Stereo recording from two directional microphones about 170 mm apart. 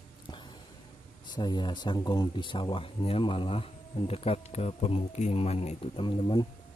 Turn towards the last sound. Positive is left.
turn(degrees=25)  # may be behind; listen again after turning